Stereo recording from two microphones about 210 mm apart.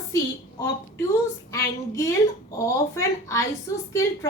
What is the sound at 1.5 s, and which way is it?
A woman's voice, 15° left (ahead or behind).